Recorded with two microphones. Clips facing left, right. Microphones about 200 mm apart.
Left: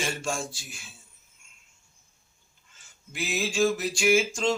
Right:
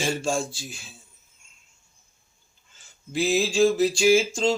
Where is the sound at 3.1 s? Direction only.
30° right (ahead or behind).